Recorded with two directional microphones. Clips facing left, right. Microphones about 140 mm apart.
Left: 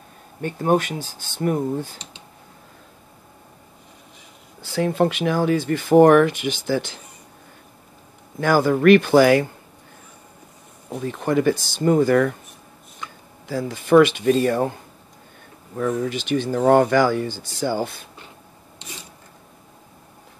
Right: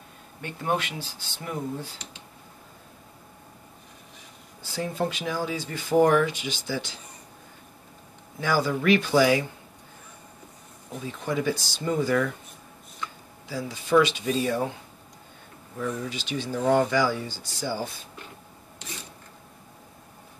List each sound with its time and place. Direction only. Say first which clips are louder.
0.4 s speech: left 8 dB; 45° left (ahead or behind)
4.6 s speech: left 9 dB; 70° left (ahead or behind)
8.4 s speech: left 7 dB; 55° left (ahead or behind)
11.0 s speech: left 8 dB; 60° left (ahead or behind)
13.5 s speech: left 7 dB; 55° left (ahead or behind)
15.8 s speech: left 8 dB; 60° left (ahead or behind)